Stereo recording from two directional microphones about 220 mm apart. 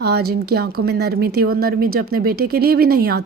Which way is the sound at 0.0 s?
45° right (ahead or behind).